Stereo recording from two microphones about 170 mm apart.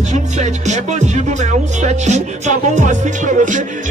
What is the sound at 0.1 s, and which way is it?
Speech, 45° right (ahead or behind).